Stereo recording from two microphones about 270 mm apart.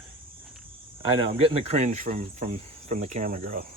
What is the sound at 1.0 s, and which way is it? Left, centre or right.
Speech, right.